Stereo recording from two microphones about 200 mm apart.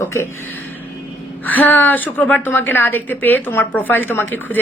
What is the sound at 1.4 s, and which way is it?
A woman's voice, 10° left (ahead or behind).